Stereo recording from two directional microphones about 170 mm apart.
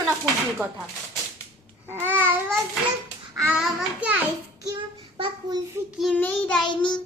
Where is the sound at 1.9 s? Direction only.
10° right (ahead or behind).